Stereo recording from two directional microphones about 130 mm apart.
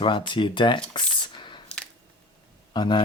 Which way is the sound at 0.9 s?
35° left (ahead or behind).